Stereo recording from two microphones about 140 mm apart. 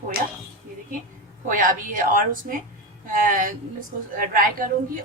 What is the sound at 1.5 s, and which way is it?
A woman's voice, 75° right (ahead or behind).